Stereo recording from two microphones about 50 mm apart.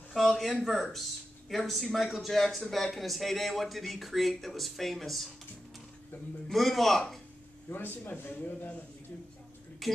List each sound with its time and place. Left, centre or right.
0.1 s speech: centre
6.5 s speech: centre
7.7 s a man's voice: left
9.8 s speech: centre